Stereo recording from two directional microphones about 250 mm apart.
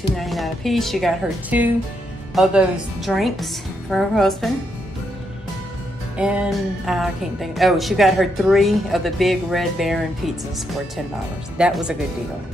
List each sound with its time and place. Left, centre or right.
0.2 s a woman's voice: centre
6.1 s a woman's voice: centre